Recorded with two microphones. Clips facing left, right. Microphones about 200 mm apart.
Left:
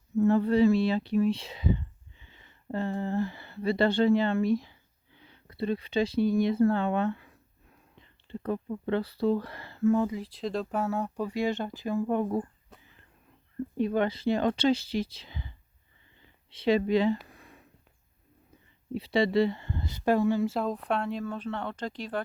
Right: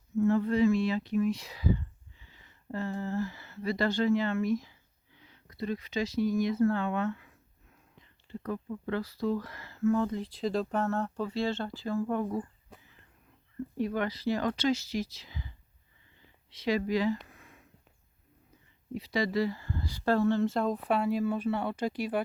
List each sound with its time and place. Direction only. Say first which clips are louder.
0.2 s speech: left 3 dB; 35° left (ahead or behind)
10.0 s speech: left 1 dB; 5° left (ahead or behind); by 12.4 s 20° left (ahead or behind)
13.7 s speech: left 4 dB; 25° left (ahead or behind)
17.2 s a sound: left 3 dB; 35° left (ahead or behind)
18.9 s speech: left 5 dB; 30° left (ahead or behind); by 22.2 s 10° right (ahead or behind)